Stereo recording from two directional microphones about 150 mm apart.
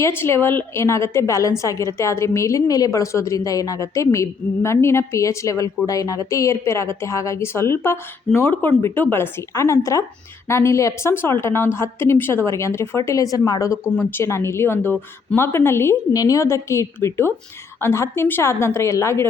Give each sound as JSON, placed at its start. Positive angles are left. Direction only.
{"t": 0.0, "sound": "a woman's voice", "side_deg": 15}